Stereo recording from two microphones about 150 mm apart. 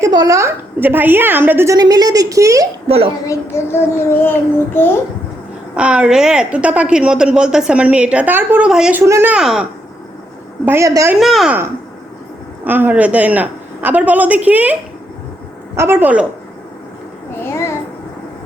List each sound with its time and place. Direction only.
0.0 s a woman's voice: 25° right (ahead or behind)
2.8 s a woman's voice: 40° right (ahead or behind)
3.5 s a child's voice: 15° left (ahead or behind)
5.7 s a woman's voice: 5° right (ahead or behind)
9.3 s speech: 5° right (ahead or behind)
10.7 s a woman's voice: 20° right (ahead or behind)
11.1 s speech: centre (ahead or behind)
12.6 s a woman's voice: 10° right (ahead or behind)
17.4 s a child's voice: 15° left (ahead or behind)